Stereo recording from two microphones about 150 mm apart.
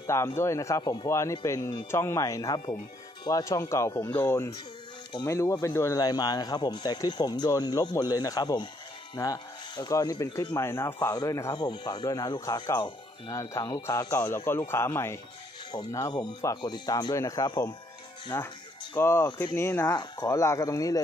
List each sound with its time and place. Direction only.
0.0 s a man's voice: 20° left (ahead or behind)